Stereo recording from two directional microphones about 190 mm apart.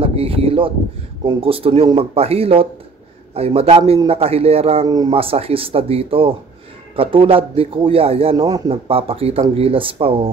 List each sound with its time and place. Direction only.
0.0 s a sound: 30° right (ahead or behind)
1.2 s speech: 30° right (ahead or behind)
4.8 s speech: 20° right (ahead or behind)